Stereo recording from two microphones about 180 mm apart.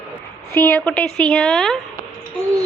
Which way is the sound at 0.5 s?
10° left (ahead or behind).